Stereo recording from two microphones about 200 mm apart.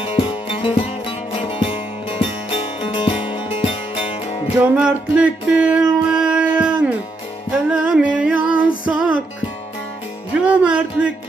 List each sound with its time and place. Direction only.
0.0 s music: 25° left (ahead or behind)
4.6 s music: 5° right (ahead or behind)
10.4 s music: 5° right (ahead or behind)